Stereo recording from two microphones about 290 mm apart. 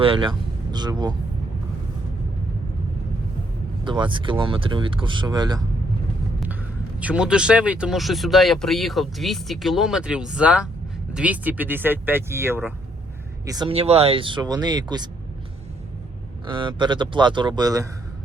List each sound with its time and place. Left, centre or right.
0.0 s speech: centre
3.8 s speech: centre
7.0 s speech: centre
16.5 s speech: centre